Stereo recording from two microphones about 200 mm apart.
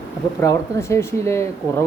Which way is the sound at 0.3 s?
15° left (ahead or behind).